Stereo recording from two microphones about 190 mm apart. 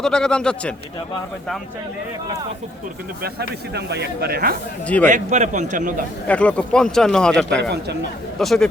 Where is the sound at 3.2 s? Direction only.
60° right (ahead or behind).